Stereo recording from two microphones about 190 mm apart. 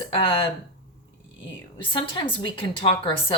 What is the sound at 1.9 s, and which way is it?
Speech, 25° left (ahead or behind).